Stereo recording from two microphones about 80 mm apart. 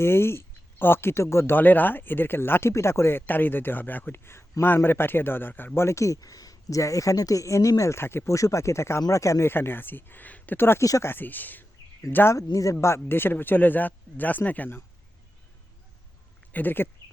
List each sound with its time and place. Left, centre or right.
0.0 s speech: left
12.4 s speech: left
12.8 s speech: left
16.5 s speech: left